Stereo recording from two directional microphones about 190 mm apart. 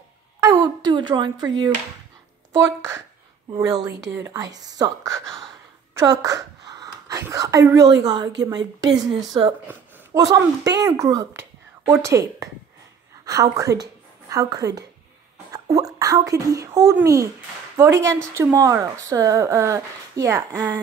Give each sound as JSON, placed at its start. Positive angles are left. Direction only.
{"t": 0.4, "sound": "a sound", "side_deg": -20}
{"t": 2.5, "sound": "a woman's voice", "side_deg": -15}
{"t": 5.9, "sound": "whispering", "side_deg": -20}
{"t": 8.0, "sound": "a woman's voice", "side_deg": -20}